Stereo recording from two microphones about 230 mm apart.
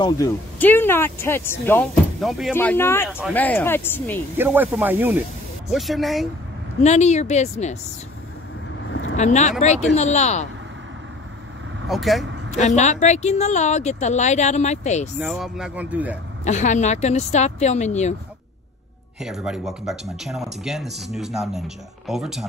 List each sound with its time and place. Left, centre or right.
0.0 s speech: centre
3.1 s speech: centre
3.3 s speech: centre
4.4 s a man's voice: centre
6.8 s speech: left
9.1 s a woman's voice: left
11.9 s speech: centre
12.4 s a woman's voice: left
15.1 s a man's voice: centre
16.4 s speech: left
19.2 s speech: centre